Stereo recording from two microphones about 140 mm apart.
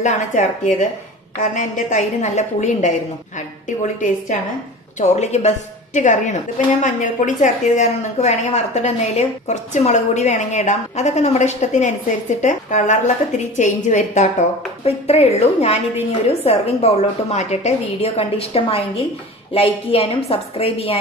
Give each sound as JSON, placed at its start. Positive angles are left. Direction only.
{"t": 0.0, "sound": "a woman's voice", "side_deg": 60}
{"t": 4.9, "sound": "a woman's voice", "side_deg": 50}